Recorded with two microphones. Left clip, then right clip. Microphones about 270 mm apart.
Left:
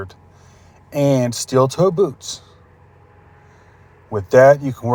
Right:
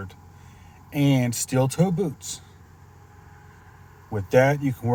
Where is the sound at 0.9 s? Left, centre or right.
Left.